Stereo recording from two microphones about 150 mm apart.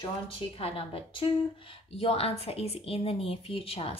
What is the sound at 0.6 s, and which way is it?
A woman's voice, 40° left (ahead or behind).